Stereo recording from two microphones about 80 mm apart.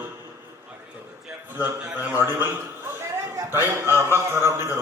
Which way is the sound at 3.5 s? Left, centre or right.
Right.